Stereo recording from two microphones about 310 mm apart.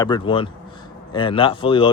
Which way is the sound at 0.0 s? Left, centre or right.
Centre.